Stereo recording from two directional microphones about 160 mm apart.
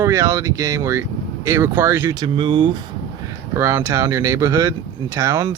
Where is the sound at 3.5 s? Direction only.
15° right (ahead or behind).